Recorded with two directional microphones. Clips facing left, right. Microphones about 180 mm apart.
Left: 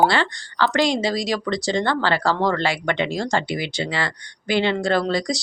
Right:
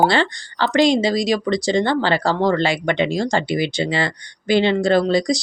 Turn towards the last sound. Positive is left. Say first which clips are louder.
# right 5 dB
turn(degrees=-20)  # may be behind; listen again after turning